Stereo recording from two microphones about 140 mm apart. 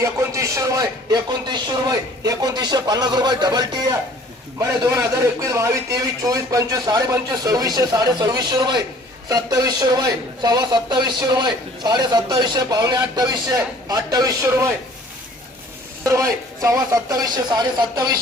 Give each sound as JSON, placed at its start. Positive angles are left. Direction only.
{"t": 0.0, "sound": "a man's voice", "side_deg": -20}
{"t": 16.0, "sound": "a man's voice", "side_deg": -25}